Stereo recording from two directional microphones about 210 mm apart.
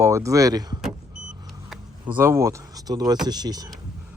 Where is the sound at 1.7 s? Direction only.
10° right (ahead or behind).